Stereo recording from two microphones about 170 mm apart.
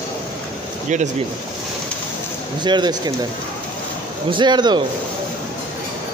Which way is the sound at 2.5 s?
25° right (ahead or behind).